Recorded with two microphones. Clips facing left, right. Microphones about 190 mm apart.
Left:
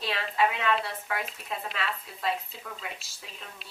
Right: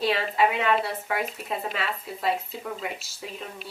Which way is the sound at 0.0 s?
5° right (ahead or behind).